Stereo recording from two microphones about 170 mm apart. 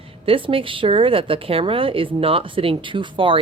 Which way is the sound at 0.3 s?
30° right (ahead or behind).